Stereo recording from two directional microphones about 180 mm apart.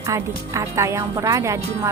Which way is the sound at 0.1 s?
15° right (ahead or behind).